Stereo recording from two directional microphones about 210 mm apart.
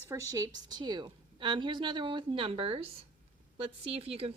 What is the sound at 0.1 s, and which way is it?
A woman's voice, 15° right (ahead or behind).